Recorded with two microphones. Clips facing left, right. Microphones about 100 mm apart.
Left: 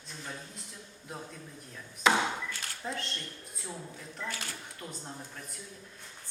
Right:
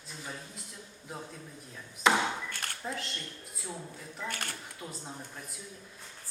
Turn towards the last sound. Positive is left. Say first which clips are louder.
# even
turn(degrees=-5)  # may be behind; listen again after turning